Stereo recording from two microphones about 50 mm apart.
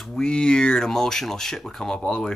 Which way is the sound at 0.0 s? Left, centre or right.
Centre.